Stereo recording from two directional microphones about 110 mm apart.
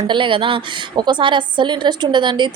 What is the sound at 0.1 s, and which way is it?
A woman's voice, 50° right (ahead or behind).